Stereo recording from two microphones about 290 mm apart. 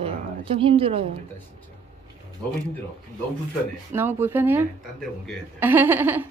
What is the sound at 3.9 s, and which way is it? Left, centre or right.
Speech, centre.